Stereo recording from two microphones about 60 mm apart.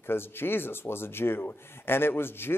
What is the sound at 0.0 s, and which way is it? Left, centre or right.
Speech, left.